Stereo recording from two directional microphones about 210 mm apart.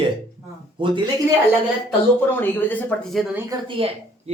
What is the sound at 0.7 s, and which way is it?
Speech, 25° right (ahead or behind).